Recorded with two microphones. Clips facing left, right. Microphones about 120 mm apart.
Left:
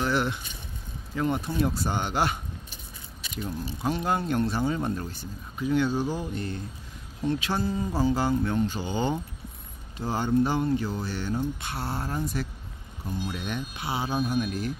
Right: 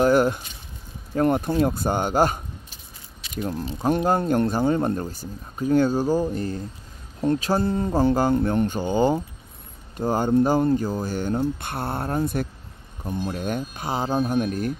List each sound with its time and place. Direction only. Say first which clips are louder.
0.0 s a sound: right 9 dB; 45° right (ahead or behind)
1.1 s speech: right 7 dB; 50° right (ahead or behind)
3.7 s speech: right 6 dB; 40° right (ahead or behind)
7.6 s speech: right 5 dB; 60° right (ahead or behind)